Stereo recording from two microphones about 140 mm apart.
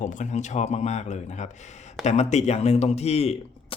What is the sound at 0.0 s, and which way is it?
Speech, 65° left (ahead or behind).